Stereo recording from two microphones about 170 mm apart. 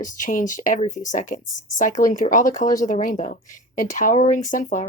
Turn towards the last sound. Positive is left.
turn(degrees=50)  # may be behind; listen again after turning